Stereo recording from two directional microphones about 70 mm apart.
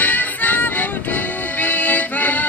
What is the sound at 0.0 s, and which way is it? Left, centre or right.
Music, left.